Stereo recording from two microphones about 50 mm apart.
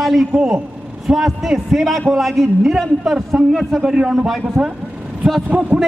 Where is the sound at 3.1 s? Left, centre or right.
Centre.